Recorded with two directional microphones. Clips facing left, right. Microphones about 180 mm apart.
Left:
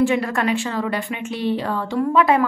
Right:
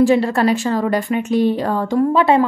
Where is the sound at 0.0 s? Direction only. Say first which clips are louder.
Right 5 dB; 35° right (ahead or behind).